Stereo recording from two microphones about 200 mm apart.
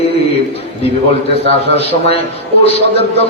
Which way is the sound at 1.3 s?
30° left (ahead or behind).